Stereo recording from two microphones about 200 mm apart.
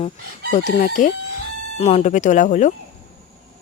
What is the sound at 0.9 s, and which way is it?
Speech, 40° left (ahead or behind).